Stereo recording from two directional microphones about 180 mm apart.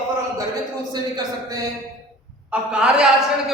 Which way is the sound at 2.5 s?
5° right (ahead or behind).